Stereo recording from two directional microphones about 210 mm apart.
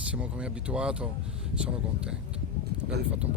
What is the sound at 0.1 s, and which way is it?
A man's voice, 5° right (ahead or behind).